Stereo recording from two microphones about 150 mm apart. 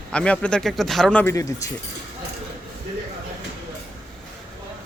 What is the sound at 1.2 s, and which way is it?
Speech, 20° left (ahead or behind).